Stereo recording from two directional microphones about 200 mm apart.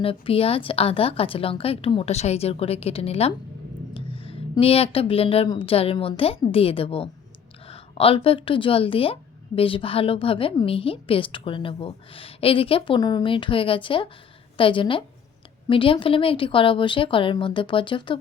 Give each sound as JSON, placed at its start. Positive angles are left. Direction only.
{"t": 0.0, "sound": "a woman's voice", "side_deg": 25}